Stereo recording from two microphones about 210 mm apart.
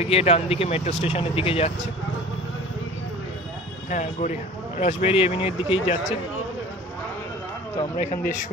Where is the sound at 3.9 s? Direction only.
35° left (ahead or behind).